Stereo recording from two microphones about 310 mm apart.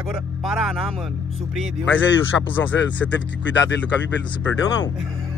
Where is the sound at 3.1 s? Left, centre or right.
Left.